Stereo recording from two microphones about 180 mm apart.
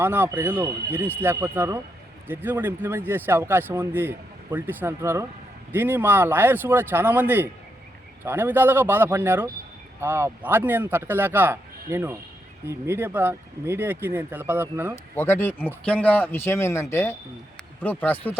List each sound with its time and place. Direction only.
0.0 s speech: 10° right (ahead or behind)
15.1 s speech: 10° left (ahead or behind)